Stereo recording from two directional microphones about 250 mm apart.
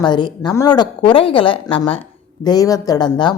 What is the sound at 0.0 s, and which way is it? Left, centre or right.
A woman's voice, centre.